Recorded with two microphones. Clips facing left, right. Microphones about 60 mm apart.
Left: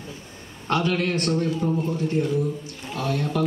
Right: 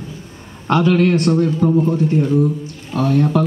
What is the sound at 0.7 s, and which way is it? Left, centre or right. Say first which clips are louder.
Speech: right 9 dB; right.